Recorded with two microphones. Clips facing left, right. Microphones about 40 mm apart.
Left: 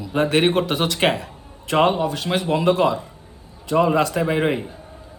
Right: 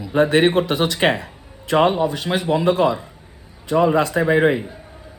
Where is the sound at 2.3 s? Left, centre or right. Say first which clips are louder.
Right 1 dB; right.